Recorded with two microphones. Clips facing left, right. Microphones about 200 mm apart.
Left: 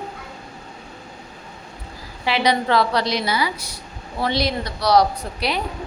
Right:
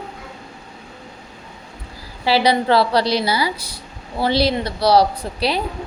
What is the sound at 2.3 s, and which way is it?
A woman's voice, 35° right (ahead or behind).